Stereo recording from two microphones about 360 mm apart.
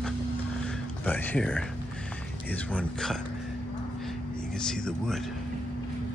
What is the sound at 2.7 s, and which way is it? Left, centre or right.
Speech, centre.